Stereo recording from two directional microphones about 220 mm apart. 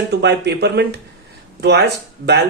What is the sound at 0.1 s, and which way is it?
A man's voice, 50° right (ahead or behind).